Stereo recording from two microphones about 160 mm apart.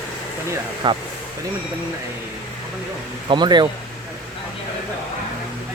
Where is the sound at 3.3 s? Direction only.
25° right (ahead or behind).